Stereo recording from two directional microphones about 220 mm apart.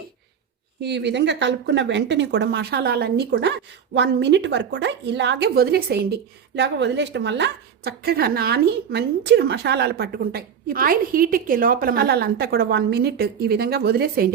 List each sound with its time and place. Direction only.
0.8 s a woman's voice: 50° right (ahead or behind)